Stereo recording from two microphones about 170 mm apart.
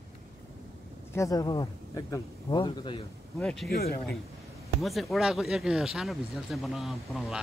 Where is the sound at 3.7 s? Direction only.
65° left (ahead or behind).